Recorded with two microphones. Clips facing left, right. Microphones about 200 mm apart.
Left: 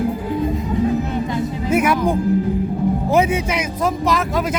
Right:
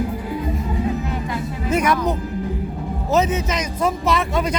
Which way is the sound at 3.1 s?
10° left (ahead or behind).